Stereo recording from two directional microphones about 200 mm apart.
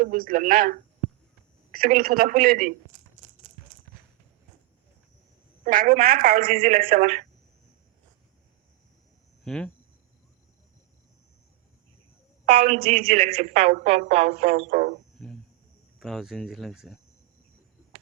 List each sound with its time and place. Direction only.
0.0 s a man's voice: 45° right (ahead or behind)
5.6 s a man's voice: 45° right (ahead or behind)
9.4 s speech: 5° left (ahead or behind)
12.6 s a woman's voice: 30° right (ahead or behind)
15.2 s speech: 5° left (ahead or behind)